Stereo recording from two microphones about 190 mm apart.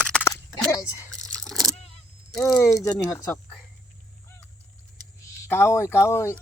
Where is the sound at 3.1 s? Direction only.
15° left (ahead or behind).